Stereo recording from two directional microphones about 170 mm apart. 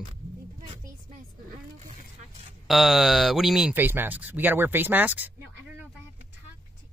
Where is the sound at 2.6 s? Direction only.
Centre (ahead or behind).